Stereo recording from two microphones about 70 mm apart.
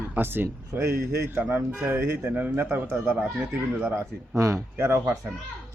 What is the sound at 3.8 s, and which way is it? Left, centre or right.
Speech, right.